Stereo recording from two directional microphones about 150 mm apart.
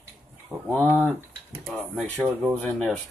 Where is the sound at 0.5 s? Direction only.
15° right (ahead or behind).